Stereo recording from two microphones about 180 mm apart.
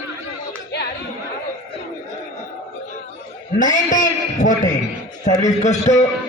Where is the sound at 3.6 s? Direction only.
45° left (ahead or behind).